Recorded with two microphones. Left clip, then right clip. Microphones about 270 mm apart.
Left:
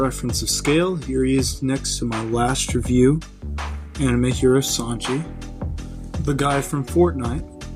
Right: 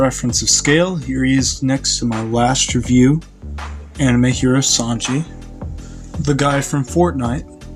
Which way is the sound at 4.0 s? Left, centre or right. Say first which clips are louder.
Right 3 dB; left.